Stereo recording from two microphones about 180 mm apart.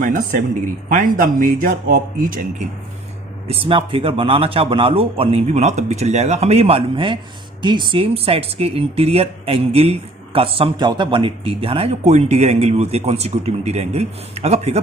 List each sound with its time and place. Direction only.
0.0 s a man's voice: 50° right (ahead or behind)
3.5 s speech: 30° right (ahead or behind)